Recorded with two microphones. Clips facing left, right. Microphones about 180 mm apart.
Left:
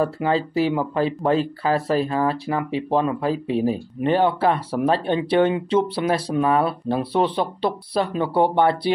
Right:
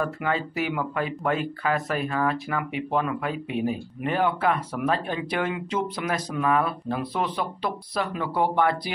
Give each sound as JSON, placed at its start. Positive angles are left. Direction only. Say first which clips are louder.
{"t": 0.0, "sound": "speech", "louder": "left 6 dB", "side_deg": 30}